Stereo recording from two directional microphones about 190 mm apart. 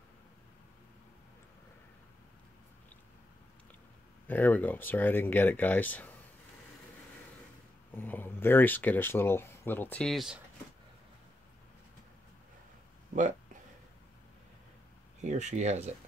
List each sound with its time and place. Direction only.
4.3 s speech: 10° left (ahead or behind)
7.9 s speech: 10° left (ahead or behind)
15.2 s speech: 40° right (ahead or behind)